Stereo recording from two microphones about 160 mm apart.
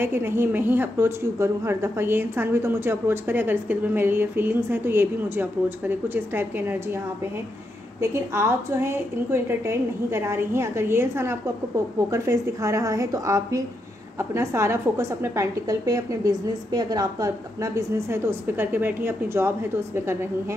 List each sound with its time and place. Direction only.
0.0 s a woman's voice: 15° right (ahead or behind)
8.0 s a woman's voice: 15° right (ahead or behind)